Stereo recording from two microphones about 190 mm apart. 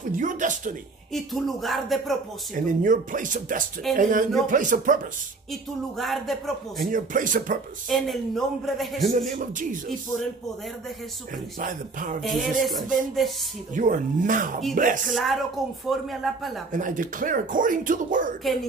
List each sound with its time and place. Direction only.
0.1 s speech: 40° right (ahead or behind)
1.1 s speech: centre (ahead or behind)
2.5 s speech: 45° right (ahead or behind)
5.5 s speech: centre (ahead or behind)
6.8 s speech: 45° right (ahead or behind)
7.9 s speech: centre (ahead or behind)
9.4 s speech: 45° right (ahead or behind)
11.6 s speech: 45° right (ahead or behind)
12.2 s speech: centre (ahead or behind)
13.7 s speech: 45° right (ahead or behind)
15.1 s speech: centre (ahead or behind)
16.7 s speech: 45° right (ahead or behind)
18.4 s speech: centre (ahead or behind)